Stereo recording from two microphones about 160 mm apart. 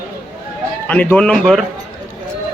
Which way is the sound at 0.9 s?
10° left (ahead or behind).